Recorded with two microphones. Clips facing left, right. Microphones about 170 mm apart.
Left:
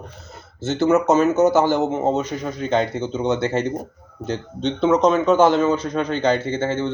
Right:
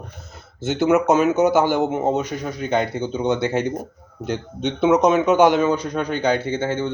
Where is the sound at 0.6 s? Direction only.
15° right (ahead or behind).